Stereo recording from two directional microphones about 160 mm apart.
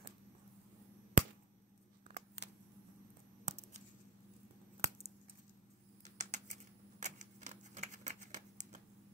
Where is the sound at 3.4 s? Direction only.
45° right (ahead or behind).